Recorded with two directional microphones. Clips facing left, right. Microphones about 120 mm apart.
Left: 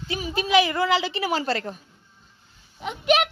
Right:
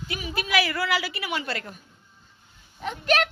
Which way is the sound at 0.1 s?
30° left (ahead or behind).